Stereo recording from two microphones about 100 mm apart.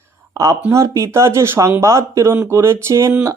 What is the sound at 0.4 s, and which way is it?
A man's voice, 35° right (ahead or behind).